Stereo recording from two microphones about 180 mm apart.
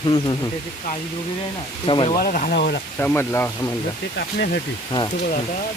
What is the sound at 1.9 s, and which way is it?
Speech, 30° left (ahead or behind).